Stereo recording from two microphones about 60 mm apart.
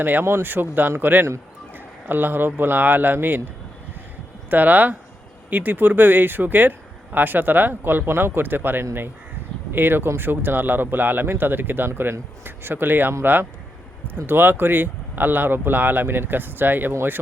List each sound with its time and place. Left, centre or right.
0.0 s speech: right